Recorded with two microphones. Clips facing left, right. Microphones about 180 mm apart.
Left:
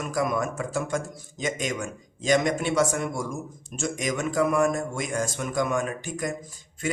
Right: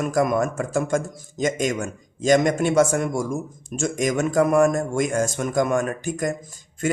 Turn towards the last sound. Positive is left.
turn(degrees=-45)  # may be behind; listen again after turning